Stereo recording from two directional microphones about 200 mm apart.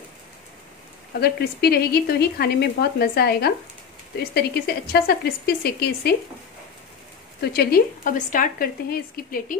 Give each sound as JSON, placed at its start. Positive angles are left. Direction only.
{"t": 1.2, "sound": "speech", "side_deg": 50}
{"t": 7.5, "sound": "speech", "side_deg": 50}